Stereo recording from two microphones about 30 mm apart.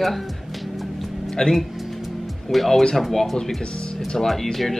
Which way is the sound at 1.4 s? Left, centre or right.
Centre.